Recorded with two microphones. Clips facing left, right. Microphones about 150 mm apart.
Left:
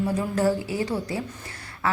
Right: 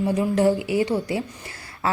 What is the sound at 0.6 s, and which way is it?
Speech, 85° right.